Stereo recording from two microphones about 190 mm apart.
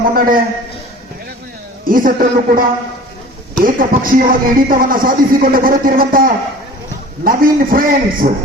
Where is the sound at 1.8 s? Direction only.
50° right (ahead or behind).